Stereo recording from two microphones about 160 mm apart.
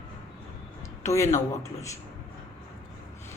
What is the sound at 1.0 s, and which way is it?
Speech, 20° left (ahead or behind).